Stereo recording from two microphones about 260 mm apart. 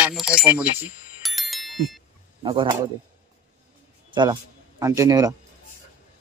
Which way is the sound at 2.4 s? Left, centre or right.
Centre.